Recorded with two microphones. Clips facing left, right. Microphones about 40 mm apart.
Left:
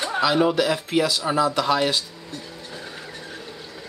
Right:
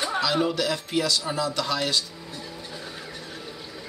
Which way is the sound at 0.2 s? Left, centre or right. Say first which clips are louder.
Left 7 dB; centre.